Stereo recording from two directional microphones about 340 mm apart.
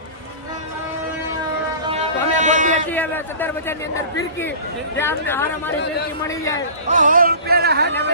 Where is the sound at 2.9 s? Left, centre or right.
Centre.